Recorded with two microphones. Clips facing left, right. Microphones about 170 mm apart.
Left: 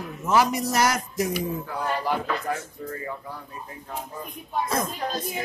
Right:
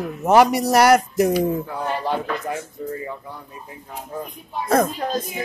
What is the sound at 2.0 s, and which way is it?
Speech, 20° right (ahead or behind).